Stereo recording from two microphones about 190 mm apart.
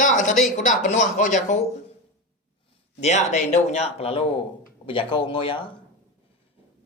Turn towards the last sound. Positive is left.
turn(degrees=25)  # may be behind; listen again after turning